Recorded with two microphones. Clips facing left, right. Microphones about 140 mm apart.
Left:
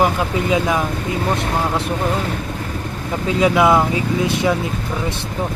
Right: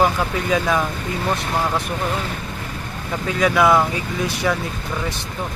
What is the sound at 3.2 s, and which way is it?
Speech, 20° left (ahead or behind).